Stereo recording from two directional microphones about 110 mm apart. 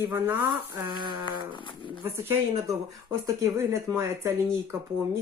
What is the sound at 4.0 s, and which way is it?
Speech, 25° right (ahead or behind).